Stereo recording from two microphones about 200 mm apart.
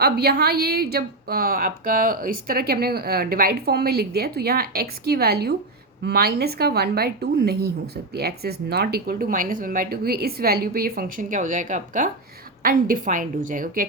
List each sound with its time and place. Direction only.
0.0 s a woman's voice: 50° right (ahead or behind)